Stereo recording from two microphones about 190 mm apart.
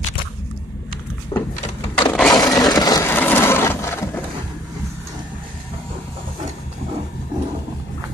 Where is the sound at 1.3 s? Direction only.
25° left (ahead or behind).